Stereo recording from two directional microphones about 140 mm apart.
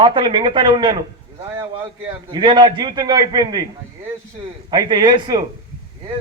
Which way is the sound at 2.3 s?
35° right (ahead or behind).